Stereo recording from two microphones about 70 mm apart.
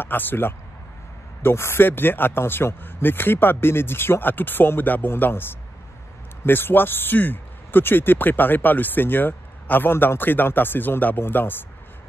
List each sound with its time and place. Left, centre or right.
0.0 s speech: left
6.4 s speech: left